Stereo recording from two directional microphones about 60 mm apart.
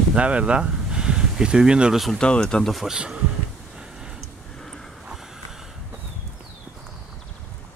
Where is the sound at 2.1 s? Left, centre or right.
Centre.